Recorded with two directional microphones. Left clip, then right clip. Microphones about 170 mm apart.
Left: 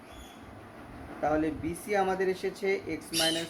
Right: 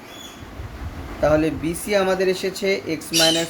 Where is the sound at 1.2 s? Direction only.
50° right (ahead or behind).